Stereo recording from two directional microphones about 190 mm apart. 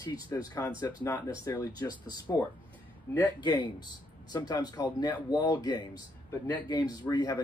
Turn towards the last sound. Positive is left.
turn(degrees=20)  # may be behind; listen again after turning